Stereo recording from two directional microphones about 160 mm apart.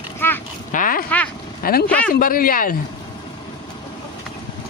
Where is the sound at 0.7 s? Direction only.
60° left (ahead or behind).